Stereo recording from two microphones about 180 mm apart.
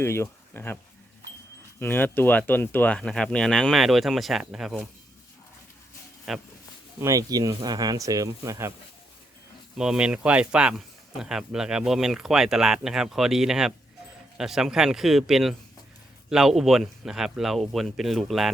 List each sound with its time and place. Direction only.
0.0 s speech: 15° left (ahead or behind)
1.8 s speech: 10° left (ahead or behind)
6.3 s speech: centre (ahead or behind)
7.0 s speech: 20° right (ahead or behind)
9.7 s speech: 5° right (ahead or behind)